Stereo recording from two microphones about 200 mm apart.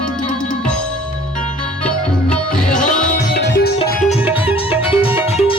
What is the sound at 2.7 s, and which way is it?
Music, 40° left (ahead or behind).